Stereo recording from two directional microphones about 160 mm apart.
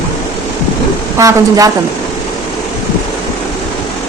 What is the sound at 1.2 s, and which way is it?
Speech, 20° right (ahead or behind).